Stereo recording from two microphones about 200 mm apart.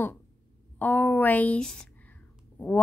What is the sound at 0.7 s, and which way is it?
A woman's voice, 10° left (ahead or behind).